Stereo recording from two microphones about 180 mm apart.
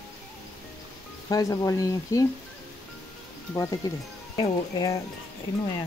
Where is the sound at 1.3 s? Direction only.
20° left (ahead or behind).